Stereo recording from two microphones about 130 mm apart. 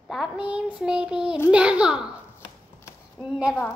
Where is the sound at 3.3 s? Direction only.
5° right (ahead or behind).